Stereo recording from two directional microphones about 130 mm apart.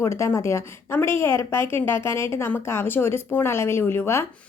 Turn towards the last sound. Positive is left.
turn(degrees=20)  # may be behind; listen again after turning